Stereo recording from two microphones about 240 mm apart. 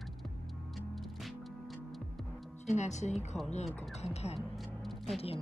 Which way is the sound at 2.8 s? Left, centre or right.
Left.